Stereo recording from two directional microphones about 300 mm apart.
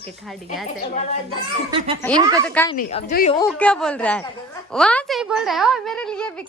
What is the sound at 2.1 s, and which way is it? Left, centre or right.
Speech, centre.